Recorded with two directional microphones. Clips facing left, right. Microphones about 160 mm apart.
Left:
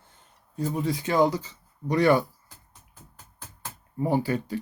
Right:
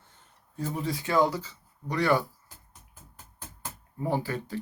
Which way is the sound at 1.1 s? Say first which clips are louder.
Left 2 dB; 20° left (ahead or behind).